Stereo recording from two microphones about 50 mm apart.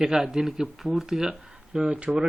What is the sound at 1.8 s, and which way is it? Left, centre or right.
Speech, right.